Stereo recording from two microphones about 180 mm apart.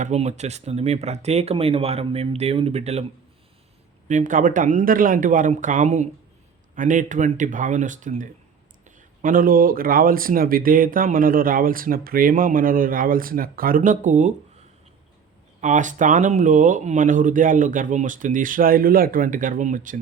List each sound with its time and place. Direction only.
0.0 s speech: 40° right (ahead or behind)
4.1 s speech: 45° right (ahead or behind)
15.6 s speech: 45° right (ahead or behind)